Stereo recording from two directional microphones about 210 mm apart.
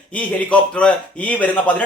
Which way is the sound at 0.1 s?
5° left (ahead or behind).